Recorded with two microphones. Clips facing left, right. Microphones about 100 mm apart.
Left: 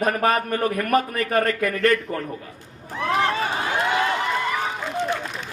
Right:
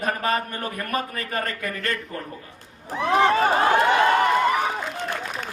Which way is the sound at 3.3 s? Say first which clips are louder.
Right 6 dB; 45° right (ahead or behind).